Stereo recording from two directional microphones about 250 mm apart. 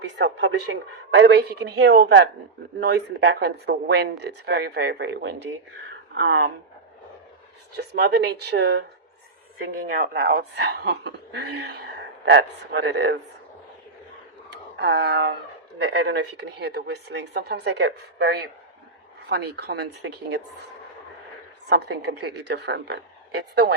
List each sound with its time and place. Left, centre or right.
0.2 s speech: right
7.8 s speech: right
14.8 s speech: right
21.7 s speech: right